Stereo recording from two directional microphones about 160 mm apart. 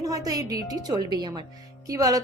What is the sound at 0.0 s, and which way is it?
A woman's voice, 20° right (ahead or behind).